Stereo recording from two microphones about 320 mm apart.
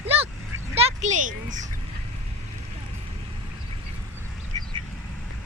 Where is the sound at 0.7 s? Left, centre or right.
Right.